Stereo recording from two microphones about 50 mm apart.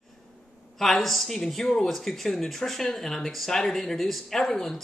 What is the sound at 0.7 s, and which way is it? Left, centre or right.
Speech, centre.